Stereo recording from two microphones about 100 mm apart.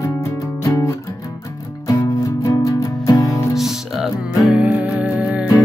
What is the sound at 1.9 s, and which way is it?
Music, 35° left (ahead or behind).